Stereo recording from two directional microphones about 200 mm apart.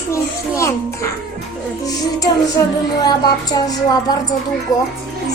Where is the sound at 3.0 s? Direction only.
20° left (ahead or behind).